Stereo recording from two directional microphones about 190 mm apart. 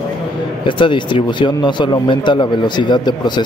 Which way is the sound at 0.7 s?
25° left (ahead or behind).